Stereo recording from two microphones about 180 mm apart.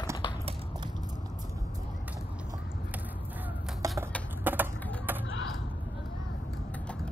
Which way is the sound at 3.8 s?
15° right (ahead or behind).